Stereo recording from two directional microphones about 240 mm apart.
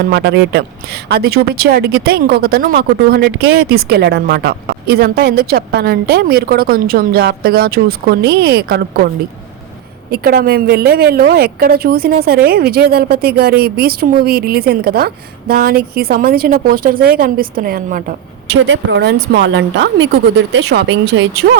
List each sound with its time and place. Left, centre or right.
0.0 s speech: right
10.1 s speech: right
18.6 s speech: right